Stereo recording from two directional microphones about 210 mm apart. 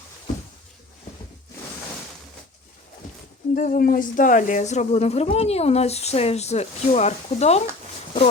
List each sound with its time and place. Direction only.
3.5 s speech: 40° left (ahead or behind)